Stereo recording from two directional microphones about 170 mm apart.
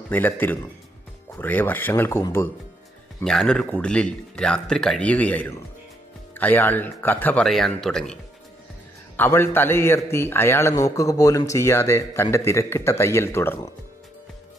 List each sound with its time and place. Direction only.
0.1 s a man's voice: 10° left (ahead or behind)